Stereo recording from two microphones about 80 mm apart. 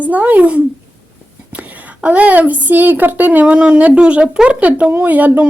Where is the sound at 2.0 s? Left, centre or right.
Centre.